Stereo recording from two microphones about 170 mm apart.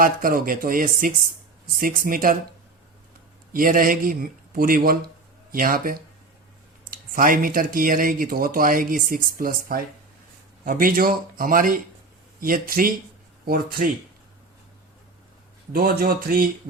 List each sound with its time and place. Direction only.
0.0 s speech: 55° right (ahead or behind)
3.5 s speech: 55° right (ahead or behind)
15.7 s speech: 60° right (ahead or behind)